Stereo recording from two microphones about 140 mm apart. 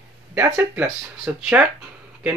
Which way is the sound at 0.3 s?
15° right (ahead or behind).